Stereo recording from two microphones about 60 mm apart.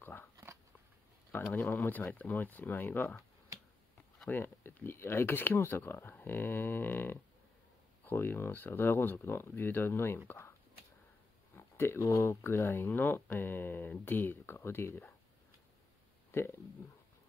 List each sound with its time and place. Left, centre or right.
0.0 s shuffling cards: left
1.3 s speech: left
4.3 s speech: left
11.5 s a sound: left
12.1 s speech: left
16.3 s speech: left